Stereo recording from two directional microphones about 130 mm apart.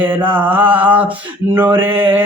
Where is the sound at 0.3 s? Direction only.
15° right (ahead or behind).